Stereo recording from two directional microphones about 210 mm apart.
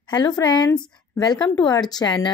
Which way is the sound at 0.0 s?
20° left (ahead or behind).